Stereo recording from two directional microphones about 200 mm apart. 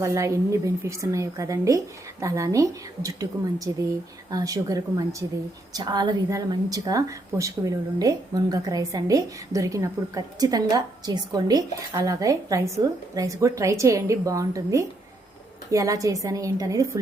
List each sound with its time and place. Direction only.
0.0 s speech: 15° right (ahead or behind)